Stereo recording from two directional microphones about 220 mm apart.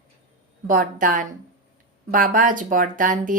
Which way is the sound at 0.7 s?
40° right (ahead or behind).